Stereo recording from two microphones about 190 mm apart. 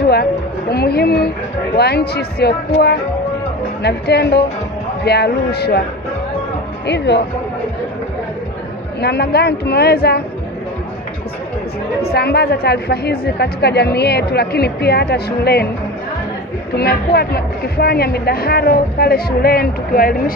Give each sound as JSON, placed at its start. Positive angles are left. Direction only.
{"t": 0.1, "sound": "a woman's voice", "side_deg": 55}
{"t": 7.1, "sound": "speech", "side_deg": 65}
{"t": 9.0, "sound": "a woman's voice", "side_deg": 60}
{"t": 12.1, "sound": "a woman's voice", "side_deg": 60}
{"t": 16.7, "sound": "a woman's voice", "side_deg": 55}